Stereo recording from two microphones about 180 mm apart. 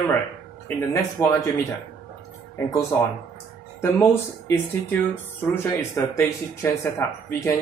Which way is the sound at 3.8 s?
15° left (ahead or behind).